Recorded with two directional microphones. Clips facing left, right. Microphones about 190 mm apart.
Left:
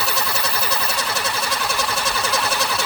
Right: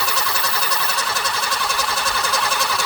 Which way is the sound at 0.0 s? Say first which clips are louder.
Left 1 dB; 5° left (ahead or behind).